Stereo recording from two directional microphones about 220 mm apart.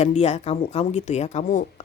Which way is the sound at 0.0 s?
30° left (ahead or behind).